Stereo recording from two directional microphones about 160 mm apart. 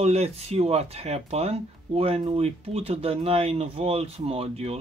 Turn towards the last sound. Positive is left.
turn(degrees=-40)  # may be behind; listen again after turning